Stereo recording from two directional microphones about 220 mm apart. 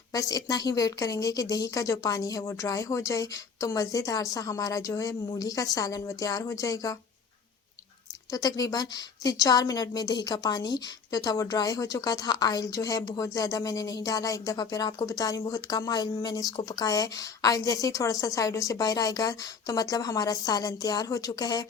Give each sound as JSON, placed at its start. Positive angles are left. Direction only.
{"t": 0.1, "sound": "a woman's voice", "side_deg": 15}
{"t": 8.3, "sound": "a woman's voice", "side_deg": 15}